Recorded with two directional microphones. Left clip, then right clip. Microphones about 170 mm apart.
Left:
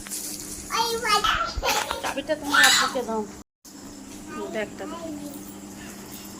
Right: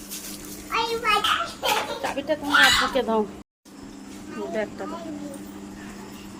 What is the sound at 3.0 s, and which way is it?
Speech, 30° right (ahead or behind).